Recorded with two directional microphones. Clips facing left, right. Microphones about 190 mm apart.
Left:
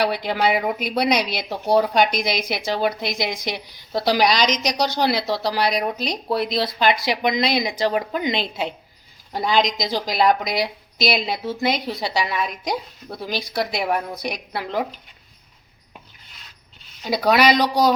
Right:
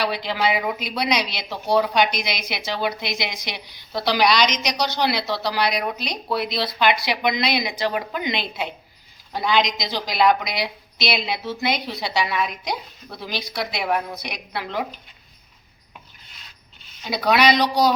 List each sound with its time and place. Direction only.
0.0 s a woman's voice: 55° left (ahead or behind)
17.1 s speech: 45° left (ahead or behind)